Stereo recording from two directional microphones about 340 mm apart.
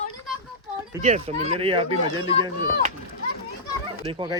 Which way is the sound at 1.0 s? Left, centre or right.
Centre.